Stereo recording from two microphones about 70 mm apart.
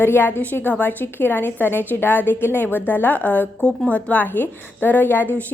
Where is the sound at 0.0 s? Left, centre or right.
Left.